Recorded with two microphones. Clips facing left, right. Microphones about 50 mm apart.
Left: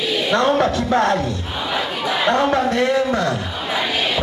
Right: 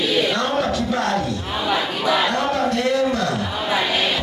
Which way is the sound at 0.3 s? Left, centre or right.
Left.